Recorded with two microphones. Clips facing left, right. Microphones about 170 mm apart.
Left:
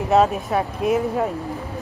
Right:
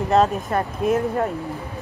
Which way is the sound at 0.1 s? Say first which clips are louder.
Left 1 dB; 5° left (ahead or behind).